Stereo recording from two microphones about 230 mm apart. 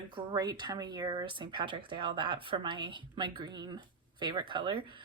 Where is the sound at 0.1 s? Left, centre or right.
Centre.